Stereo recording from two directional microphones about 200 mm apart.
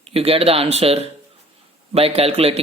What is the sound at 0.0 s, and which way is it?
Speech, 30° right (ahead or behind).